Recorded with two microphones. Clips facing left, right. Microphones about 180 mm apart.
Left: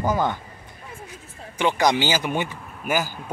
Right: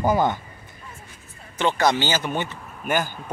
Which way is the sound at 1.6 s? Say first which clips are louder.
Even; 15° left (ahead or behind).